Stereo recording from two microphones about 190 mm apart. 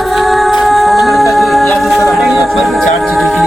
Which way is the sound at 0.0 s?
Centre (ahead or behind).